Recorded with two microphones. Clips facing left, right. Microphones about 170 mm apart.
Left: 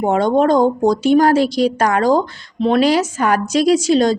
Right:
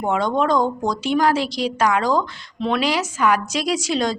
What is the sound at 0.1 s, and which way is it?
A woman's voice, 45° left (ahead or behind).